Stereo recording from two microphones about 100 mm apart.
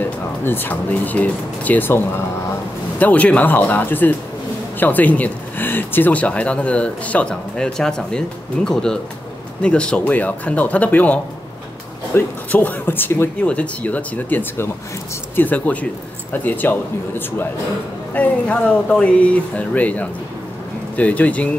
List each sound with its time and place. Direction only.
0.0 s speech: 20° left (ahead or behind)
18.1 s speech: 15° left (ahead or behind)